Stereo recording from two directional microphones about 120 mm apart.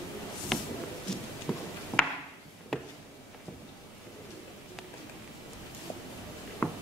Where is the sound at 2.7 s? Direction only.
Centre (ahead or behind).